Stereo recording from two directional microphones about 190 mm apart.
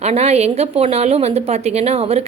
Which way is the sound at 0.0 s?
35° right (ahead or behind).